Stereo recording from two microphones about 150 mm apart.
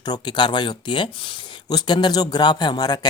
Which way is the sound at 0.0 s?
30° left (ahead or behind).